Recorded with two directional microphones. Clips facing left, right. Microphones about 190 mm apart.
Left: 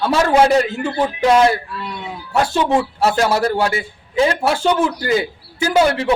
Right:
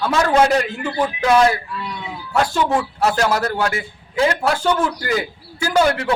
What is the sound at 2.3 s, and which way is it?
A man's voice, 25° left (ahead or behind).